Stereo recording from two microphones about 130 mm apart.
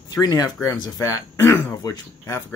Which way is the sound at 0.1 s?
30° left (ahead or behind).